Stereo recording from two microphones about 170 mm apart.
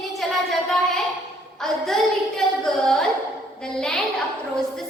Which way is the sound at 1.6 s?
Centre (ahead or behind).